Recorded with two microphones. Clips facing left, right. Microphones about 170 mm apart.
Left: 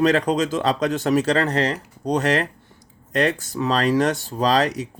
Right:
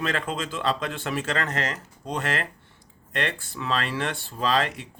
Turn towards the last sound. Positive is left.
turn(degrees=40)  # may be behind; listen again after turning